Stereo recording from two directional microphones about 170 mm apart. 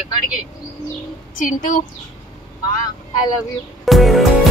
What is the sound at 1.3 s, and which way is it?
Speech, 50° left (ahead or behind).